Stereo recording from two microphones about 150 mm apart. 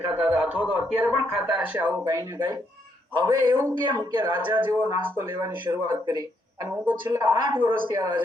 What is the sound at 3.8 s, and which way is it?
Speech, 30° right (ahead or behind).